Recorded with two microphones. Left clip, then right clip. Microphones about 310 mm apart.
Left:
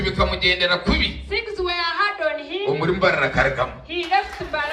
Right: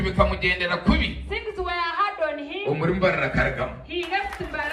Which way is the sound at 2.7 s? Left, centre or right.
Centre.